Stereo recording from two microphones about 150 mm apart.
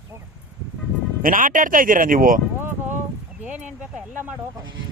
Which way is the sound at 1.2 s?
65° right (ahead or behind).